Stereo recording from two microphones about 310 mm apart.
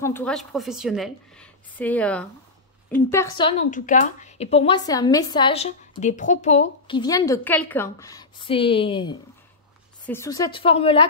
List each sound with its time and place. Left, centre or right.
0.0 s a woman's voice: centre